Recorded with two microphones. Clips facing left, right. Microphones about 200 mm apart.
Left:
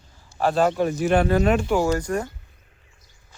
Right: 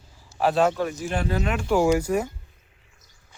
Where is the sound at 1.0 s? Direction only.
65° left (ahead or behind).